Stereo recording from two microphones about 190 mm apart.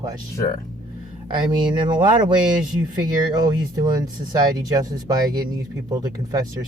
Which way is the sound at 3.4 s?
20° right (ahead or behind).